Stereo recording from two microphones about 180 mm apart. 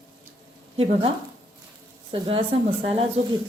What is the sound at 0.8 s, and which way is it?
A woman's voice, 35° right (ahead or behind).